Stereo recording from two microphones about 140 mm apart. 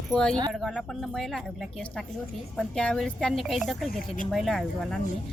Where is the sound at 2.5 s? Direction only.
5° left (ahead or behind).